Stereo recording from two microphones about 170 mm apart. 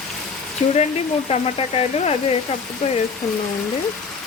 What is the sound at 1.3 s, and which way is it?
Speech, 35° left (ahead or behind).